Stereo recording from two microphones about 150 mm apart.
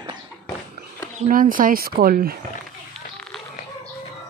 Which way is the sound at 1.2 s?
65° right (ahead or behind).